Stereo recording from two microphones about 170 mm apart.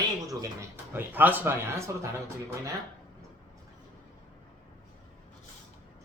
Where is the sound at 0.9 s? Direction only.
10° right (ahead or behind).